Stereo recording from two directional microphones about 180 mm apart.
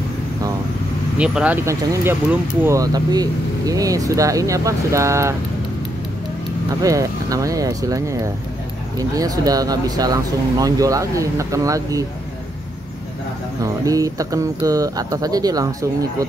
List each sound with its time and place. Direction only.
1.1 s speech: 5° right (ahead or behind)
6.8 s speech: 20° right (ahead or behind)
13.6 s speech: 20° right (ahead or behind)